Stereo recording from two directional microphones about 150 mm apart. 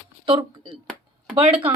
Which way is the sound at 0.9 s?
5° right (ahead or behind).